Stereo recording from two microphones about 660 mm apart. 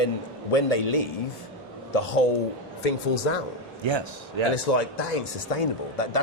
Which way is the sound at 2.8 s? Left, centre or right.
Left.